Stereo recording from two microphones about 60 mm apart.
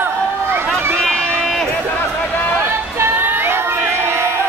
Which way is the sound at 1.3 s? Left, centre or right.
Centre.